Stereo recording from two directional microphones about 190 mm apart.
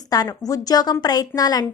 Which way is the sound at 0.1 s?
20° left (ahead or behind).